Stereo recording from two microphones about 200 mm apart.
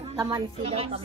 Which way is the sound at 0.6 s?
30° right (ahead or behind).